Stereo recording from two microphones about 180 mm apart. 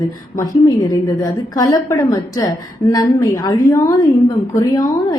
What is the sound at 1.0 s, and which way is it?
A woman's voice, 20° left (ahead or behind).